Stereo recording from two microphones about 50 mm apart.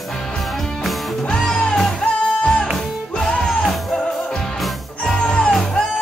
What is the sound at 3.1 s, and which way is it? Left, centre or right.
Music, centre.